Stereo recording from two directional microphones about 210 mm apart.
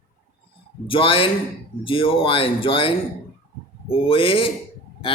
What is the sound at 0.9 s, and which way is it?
Speech, 25° left (ahead or behind).